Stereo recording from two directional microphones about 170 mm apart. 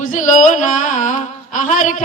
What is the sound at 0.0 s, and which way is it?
Music, 50° left (ahead or behind).